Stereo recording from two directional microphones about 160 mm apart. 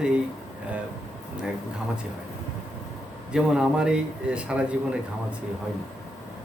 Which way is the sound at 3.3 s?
5° right (ahead or behind).